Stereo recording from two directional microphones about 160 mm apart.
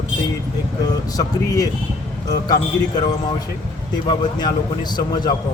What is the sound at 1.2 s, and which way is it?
Speech, 20° left (ahead or behind).